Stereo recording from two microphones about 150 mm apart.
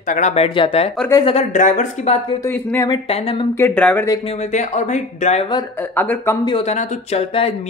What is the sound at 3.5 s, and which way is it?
Speech, 10° left (ahead or behind).